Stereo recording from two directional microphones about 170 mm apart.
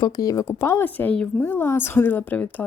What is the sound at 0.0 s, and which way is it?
A woman's voice, 20° left (ahead or behind).